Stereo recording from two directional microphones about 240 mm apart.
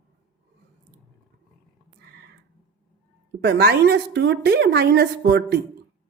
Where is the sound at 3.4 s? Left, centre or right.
Right.